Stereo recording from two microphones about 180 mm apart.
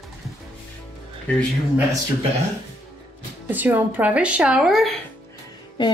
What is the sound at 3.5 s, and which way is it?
Speech, 10° right (ahead or behind).